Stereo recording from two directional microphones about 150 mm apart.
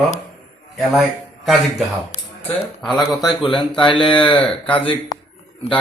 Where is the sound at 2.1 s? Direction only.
50° left (ahead or behind).